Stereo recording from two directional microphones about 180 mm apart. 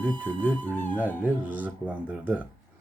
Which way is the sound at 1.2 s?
10° right (ahead or behind).